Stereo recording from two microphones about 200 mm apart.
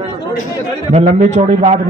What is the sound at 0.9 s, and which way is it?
Speech, 30° right (ahead or behind).